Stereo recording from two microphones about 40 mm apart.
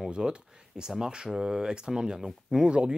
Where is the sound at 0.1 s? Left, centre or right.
Right.